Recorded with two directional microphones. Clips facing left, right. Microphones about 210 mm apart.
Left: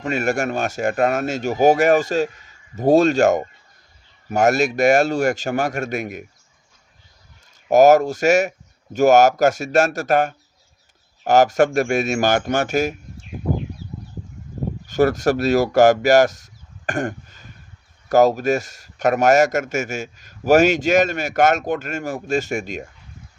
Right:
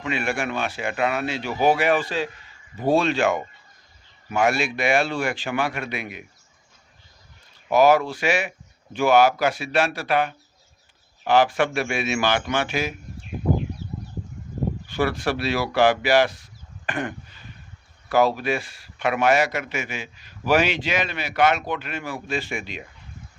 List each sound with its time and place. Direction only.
0.0 s speech: 45° left (ahead or behind)
7.7 s speech: 45° left (ahead or behind)
14.8 s speech: 45° left (ahead or behind)